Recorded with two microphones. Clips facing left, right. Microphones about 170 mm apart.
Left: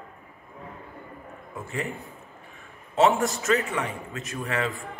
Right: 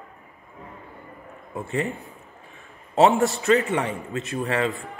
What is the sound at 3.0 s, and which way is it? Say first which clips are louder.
A man's voice: right 3 dB; 35° right (ahead or behind).